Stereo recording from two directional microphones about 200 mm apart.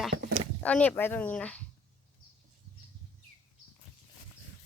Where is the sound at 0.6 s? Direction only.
5° left (ahead or behind).